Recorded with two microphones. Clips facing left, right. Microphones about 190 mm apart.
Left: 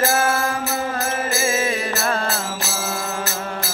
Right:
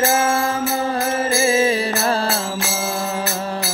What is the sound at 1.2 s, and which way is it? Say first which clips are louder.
Music: right 6 dB; 30° right (ahead or behind).